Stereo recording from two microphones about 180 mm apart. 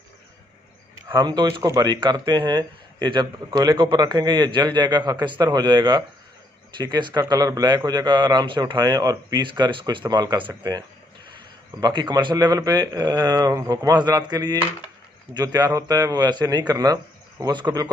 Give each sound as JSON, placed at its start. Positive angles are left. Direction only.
{"t": 1.0, "sound": "speech", "side_deg": -25}
{"t": 11.8, "sound": "speech", "side_deg": -25}